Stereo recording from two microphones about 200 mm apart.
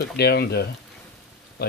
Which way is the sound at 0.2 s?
55° left (ahead or behind).